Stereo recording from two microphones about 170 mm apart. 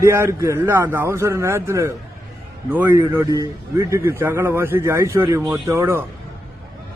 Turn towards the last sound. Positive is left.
turn(degrees=-15)  # may be behind; listen again after turning